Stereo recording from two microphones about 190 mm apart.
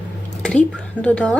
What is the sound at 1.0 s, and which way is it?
Speech, 5° left (ahead or behind).